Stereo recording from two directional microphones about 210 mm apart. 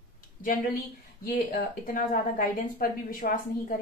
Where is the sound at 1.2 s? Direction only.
45° left (ahead or behind).